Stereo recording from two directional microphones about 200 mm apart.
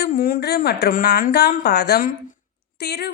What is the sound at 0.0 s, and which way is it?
A woman's voice, 50° left (ahead or behind).